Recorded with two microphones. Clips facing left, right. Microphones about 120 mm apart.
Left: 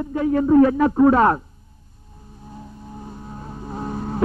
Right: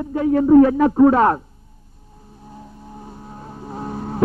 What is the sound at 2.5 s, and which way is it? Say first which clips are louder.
Vehicle: left 1 dB; 40° right (ahead or behind).